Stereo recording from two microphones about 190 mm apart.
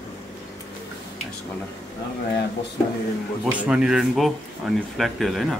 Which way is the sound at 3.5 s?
5° right (ahead or behind).